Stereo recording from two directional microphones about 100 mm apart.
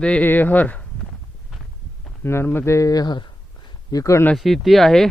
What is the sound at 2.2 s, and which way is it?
Speech, 25° left (ahead or behind).